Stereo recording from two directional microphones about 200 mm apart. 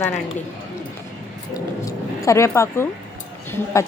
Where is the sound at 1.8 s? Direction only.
15° left (ahead or behind).